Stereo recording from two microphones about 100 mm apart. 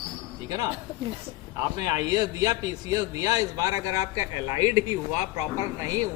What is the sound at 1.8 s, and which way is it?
A man's voice, 45° right (ahead or behind).